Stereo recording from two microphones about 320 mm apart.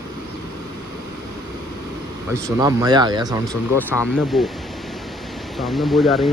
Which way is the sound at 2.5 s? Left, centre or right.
Centre.